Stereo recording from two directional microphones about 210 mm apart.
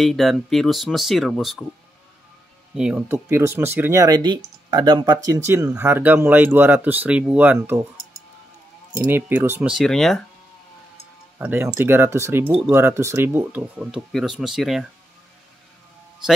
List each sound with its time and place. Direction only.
0.0 s speech: centre (ahead or behind)
2.7 s speech: 5° right (ahead or behind)
8.9 s speech: 10° right (ahead or behind)
11.3 s speech: 10° right (ahead or behind)